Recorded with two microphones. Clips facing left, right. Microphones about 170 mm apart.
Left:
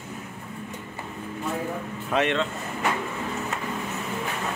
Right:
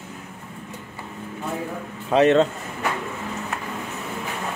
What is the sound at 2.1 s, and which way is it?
Speech, 40° right (ahead or behind).